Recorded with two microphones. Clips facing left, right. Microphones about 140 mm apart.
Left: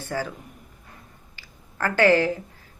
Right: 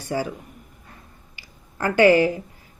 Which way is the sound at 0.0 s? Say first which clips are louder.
Right 3 dB; 15° right (ahead or behind).